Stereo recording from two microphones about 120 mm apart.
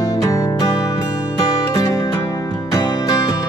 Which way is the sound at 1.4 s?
35° left (ahead or behind).